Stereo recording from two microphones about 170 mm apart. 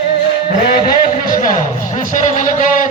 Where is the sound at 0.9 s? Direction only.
55° left (ahead or behind).